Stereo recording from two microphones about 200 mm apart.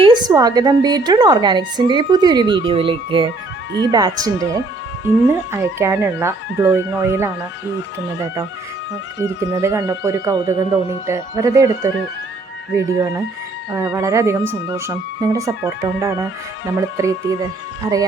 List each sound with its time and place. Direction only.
0.0 s a woman's voice: 20° right (ahead or behind)
9.1 s speech: 15° right (ahead or behind)